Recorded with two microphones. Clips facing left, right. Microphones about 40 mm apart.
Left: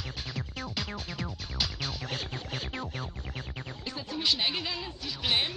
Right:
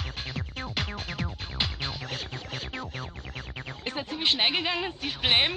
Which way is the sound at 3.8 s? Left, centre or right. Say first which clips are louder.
Right 3 dB; right.